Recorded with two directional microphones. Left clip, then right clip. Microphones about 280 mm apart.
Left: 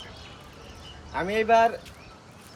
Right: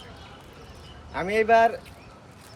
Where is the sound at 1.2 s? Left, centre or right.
Centre.